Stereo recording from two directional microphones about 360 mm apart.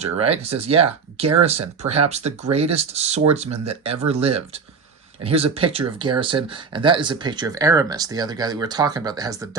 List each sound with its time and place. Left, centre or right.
0.0 s speech: centre